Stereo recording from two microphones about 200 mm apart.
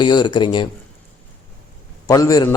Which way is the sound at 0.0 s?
20° left (ahead or behind).